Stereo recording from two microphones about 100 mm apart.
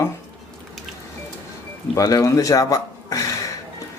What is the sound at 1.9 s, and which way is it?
Speech, 35° left (ahead or behind).